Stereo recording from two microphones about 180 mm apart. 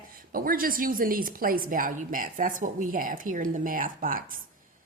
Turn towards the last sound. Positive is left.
turn(degrees=-50)  # may be behind; listen again after turning